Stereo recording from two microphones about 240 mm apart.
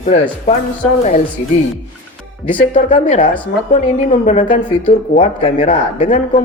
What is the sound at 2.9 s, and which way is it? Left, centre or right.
A woman's voice, left.